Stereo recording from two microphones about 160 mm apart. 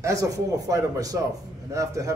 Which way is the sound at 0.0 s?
20° right (ahead or behind).